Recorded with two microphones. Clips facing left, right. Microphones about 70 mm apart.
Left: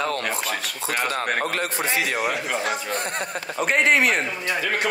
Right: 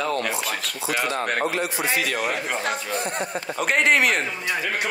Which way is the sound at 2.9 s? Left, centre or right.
Left.